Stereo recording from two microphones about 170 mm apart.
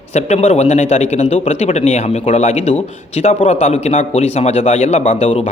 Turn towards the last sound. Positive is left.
turn(degrees=35)  # may be behind; listen again after turning